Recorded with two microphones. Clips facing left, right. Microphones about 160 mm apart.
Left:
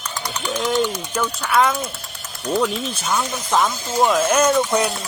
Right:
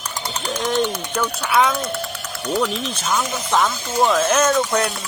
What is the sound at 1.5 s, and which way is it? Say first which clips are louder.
Speech: even; centre (ahead or behind).